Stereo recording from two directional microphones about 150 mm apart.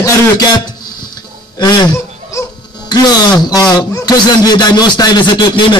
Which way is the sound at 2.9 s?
30° left (ahead or behind).